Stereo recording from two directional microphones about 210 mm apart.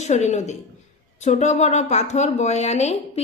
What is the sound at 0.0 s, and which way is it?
A woman's voice, 35° left (ahead or behind).